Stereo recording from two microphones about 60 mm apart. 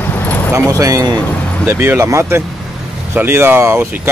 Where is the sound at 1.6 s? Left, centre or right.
Right.